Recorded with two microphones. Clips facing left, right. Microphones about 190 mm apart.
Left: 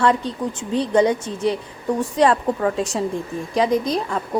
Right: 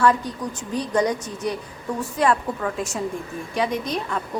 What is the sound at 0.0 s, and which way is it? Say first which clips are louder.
A woman's voice: left 1 dB; 30° left (ahead or behind).